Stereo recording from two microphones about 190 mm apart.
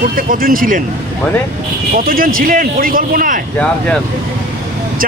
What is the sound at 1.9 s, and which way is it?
Speech, 50° right (ahead or behind).